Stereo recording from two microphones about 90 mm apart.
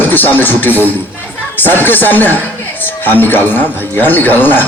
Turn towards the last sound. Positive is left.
turn(degrees=20)  # may be behind; listen again after turning